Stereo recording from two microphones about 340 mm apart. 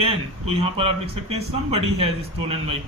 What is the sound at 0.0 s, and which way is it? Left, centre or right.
Speech, centre.